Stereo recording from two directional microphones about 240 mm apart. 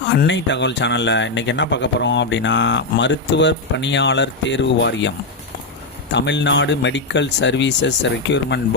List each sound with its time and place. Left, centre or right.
0.2 s speech: left